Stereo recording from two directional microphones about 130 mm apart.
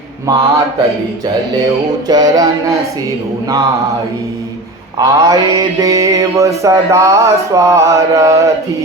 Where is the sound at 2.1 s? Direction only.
30° right (ahead or behind).